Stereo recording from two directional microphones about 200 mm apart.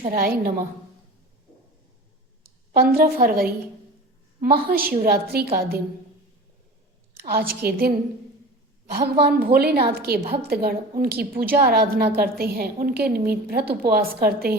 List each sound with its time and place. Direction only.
0.1 s a woman's voice: 45° right (ahead or behind)
2.7 s a woman's voice: 50° right (ahead or behind)
7.3 s a woman's voice: 50° right (ahead or behind)